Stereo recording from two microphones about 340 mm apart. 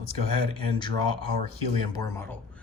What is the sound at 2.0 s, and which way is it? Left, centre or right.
Speech, centre.